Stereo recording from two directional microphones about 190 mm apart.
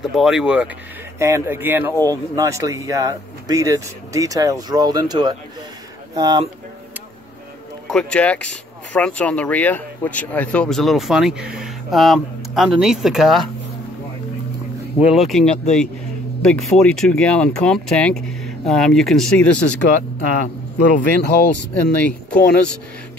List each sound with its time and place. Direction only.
0.1 s speech: centre (ahead or behind)
1.2 s speech: 15° right (ahead or behind)
7.9 s speech: 5° left (ahead or behind)
15.1 s speech: centre (ahead or behind)
21.2 s speech: 60° left (ahead or behind)
21.9 s speech: 10° left (ahead or behind)